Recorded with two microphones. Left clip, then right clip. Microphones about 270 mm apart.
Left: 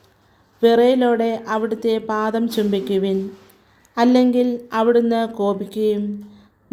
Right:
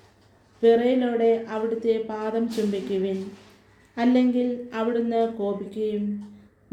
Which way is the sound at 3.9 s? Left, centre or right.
Left.